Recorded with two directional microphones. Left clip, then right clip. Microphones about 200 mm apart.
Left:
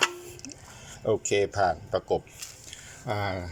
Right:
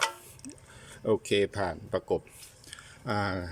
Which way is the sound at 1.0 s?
25° right (ahead or behind).